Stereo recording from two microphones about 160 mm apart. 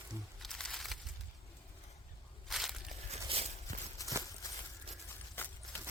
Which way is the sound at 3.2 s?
40° right (ahead or behind).